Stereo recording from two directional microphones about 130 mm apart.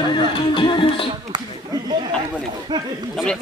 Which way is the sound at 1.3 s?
35° right (ahead or behind).